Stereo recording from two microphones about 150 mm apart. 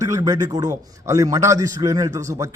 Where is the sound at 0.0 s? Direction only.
20° right (ahead or behind).